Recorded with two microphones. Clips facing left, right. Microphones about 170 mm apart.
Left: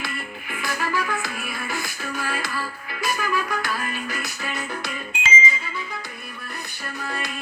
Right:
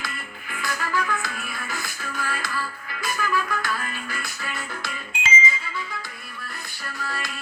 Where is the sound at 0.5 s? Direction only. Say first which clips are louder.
Left 1 dB; 20° left (ahead or behind).